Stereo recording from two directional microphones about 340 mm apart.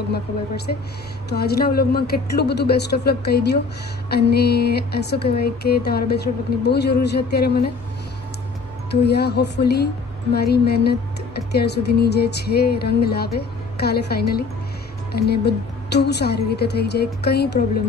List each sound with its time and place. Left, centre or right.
0.7 s speech: left
9.0 s speech: left